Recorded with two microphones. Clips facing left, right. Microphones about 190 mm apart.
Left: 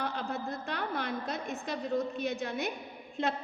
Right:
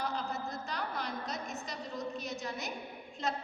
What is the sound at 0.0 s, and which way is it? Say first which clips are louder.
A woman's voice: left 2 dB; 55° left (ahead or behind).